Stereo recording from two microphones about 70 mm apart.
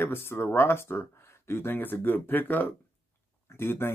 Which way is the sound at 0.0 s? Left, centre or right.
Left.